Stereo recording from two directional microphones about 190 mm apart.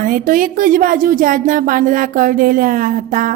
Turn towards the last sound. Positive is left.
turn(degrees=-45)  # may be behind; listen again after turning